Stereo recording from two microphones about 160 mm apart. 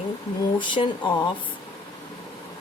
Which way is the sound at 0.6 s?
30° left (ahead or behind).